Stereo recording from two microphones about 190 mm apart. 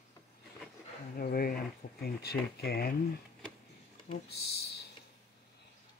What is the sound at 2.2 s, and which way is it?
Speech, 55° left (ahead or behind).